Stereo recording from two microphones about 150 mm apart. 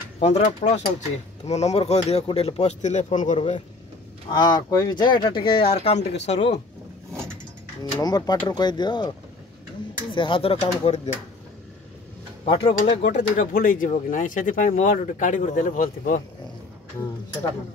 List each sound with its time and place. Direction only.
0.2 s speech: 45° left (ahead or behind)
4.3 s speech: 30° left (ahead or behind); by 6.6 s 45° left (ahead or behind)
8.0 s speech: 25° left (ahead or behind)
10.1 s speech: 35° left (ahead or behind)
12.4 s speech: 35° left (ahead or behind)
12.7 s speech: 55° left (ahead or behind)